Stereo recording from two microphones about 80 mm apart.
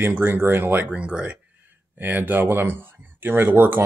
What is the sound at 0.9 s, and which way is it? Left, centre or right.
Speech, centre.